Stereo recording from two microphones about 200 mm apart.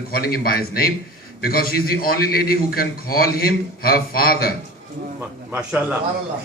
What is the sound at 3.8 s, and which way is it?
Speech, 50° left (ahead or behind).